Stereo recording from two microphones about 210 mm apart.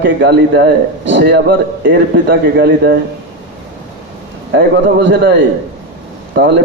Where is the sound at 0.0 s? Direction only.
55° right (ahead or behind).